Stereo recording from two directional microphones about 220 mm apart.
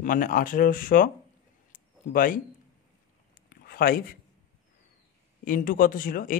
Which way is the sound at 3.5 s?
40° left (ahead or behind).